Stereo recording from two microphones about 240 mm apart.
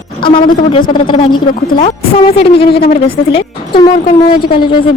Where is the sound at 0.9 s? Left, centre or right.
Centre.